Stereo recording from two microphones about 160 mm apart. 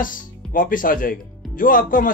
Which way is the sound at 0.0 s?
60° left (ahead or behind).